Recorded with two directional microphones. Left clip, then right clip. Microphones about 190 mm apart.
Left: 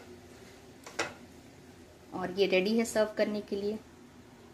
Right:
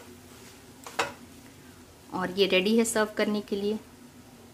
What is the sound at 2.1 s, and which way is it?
A woman's voice, 10° right (ahead or behind).